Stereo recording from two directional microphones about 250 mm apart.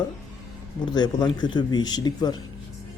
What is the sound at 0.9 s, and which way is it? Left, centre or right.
Speech, centre.